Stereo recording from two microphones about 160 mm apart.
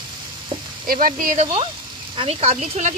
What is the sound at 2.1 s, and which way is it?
Speech, 40° right (ahead or behind).